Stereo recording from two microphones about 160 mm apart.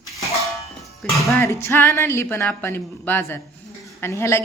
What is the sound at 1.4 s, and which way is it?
A woman's voice, 15° left (ahead or behind).